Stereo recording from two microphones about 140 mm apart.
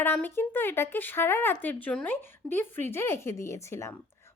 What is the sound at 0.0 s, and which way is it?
A woman's voice, 15° left (ahead or behind).